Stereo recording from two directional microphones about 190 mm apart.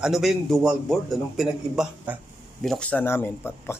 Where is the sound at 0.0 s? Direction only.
Centre (ahead or behind).